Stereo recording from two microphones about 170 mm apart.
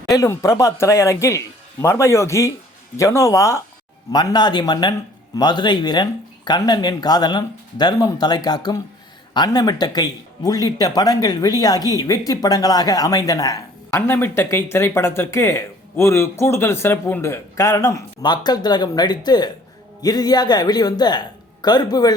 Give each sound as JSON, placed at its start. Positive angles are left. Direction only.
{"t": 0.2, "sound": "speech", "side_deg": 20}